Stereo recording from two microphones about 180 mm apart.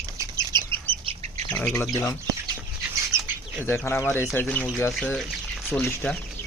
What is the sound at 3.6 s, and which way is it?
Speech, 15° left (ahead or behind).